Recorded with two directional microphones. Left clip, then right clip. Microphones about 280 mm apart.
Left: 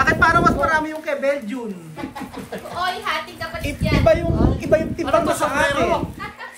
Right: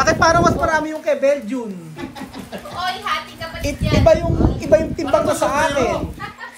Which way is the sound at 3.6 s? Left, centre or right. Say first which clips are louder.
Right 3 dB; centre.